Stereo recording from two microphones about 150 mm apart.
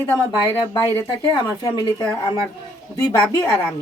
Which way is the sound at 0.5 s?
25° left (ahead or behind).